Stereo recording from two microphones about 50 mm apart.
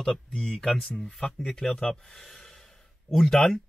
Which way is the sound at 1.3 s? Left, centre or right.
Centre.